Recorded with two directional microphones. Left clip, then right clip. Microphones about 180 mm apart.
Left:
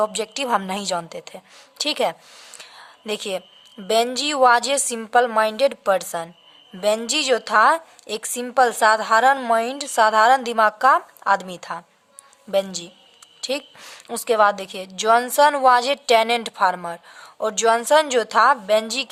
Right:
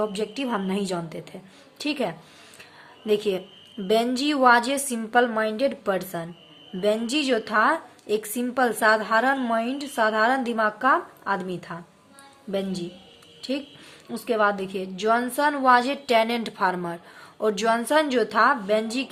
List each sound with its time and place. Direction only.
0.0 s a woman's voice: 45° left (ahead or behind)
2.6 s a sound: 45° left (ahead or behind)
3.8 s a woman's voice: 40° left (ahead or behind)